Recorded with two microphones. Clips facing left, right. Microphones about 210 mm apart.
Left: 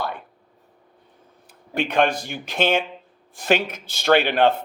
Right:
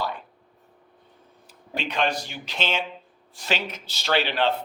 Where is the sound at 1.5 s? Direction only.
55° left (ahead or behind).